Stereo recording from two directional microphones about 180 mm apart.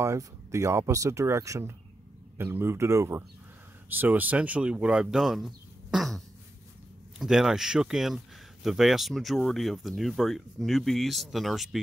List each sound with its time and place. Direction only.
0.0 s speech: 15° right (ahead or behind)